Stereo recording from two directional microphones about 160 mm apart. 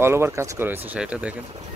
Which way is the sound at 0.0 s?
15° right (ahead or behind).